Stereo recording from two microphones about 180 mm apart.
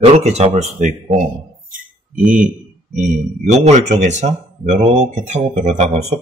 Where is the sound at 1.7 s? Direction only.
50° right (ahead or behind).